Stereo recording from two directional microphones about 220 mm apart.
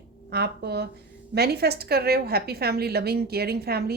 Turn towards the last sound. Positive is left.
turn(degrees=-45)  # may be behind; listen again after turning